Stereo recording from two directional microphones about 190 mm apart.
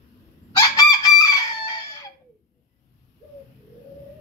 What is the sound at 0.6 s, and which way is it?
Chicken, 20° left (ahead or behind).